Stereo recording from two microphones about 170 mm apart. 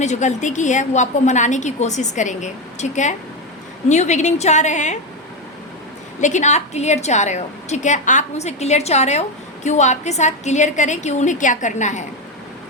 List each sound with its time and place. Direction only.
0.0 s a woman's voice: 45° left (ahead or behind)
6.1 s a woman's voice: 45° left (ahead or behind)